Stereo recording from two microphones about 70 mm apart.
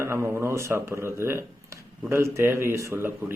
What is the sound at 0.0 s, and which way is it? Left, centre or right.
Speech, right.